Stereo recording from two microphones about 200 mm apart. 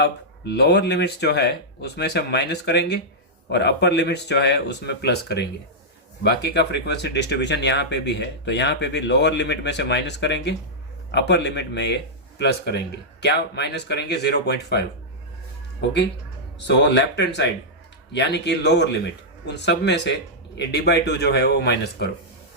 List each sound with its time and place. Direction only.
0.0 s speech: 55° left (ahead or behind)
15.8 s speech: 60° left (ahead or behind)